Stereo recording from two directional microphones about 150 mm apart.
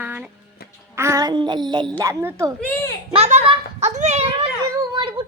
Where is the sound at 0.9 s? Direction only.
20° right (ahead or behind).